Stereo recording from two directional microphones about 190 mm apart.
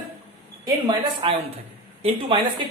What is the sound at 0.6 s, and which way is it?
A woman's voice, 25° right (ahead or behind).